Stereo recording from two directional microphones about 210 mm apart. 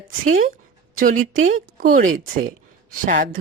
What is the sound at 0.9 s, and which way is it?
A woman's voice, 40° right (ahead or behind).